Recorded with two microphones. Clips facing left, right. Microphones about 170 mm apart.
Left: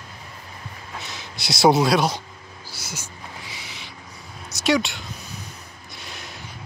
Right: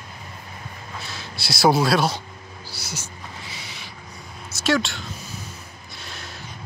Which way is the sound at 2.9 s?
15° left (ahead or behind).